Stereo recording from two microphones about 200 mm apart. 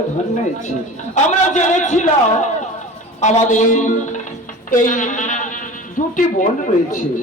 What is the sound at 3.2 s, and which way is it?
A man's voice, 35° left (ahead or behind).